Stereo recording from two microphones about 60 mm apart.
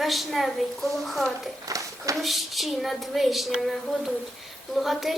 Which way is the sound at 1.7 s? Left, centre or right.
Right.